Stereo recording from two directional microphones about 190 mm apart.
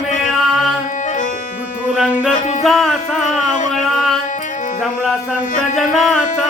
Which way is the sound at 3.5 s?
40° left (ahead or behind).